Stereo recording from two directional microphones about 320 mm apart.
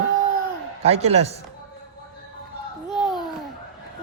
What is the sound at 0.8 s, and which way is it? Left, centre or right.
Speech, centre.